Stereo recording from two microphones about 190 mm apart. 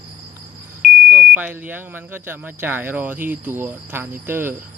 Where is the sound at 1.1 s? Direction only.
10° right (ahead or behind).